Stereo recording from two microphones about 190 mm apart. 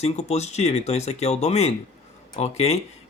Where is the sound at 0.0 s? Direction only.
35° left (ahead or behind).